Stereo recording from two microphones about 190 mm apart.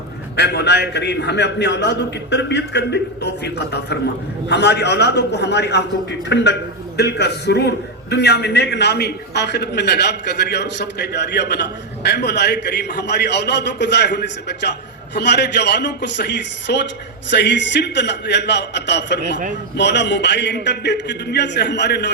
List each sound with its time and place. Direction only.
0.3 s a man's voice: 60° left (ahead or behind)